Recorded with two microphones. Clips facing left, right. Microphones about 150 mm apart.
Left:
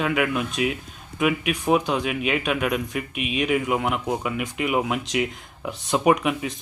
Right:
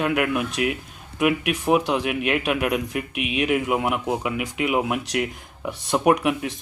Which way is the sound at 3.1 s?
65° right (ahead or behind).